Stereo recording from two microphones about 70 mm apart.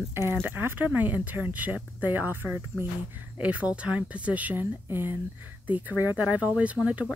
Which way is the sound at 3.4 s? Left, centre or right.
Centre.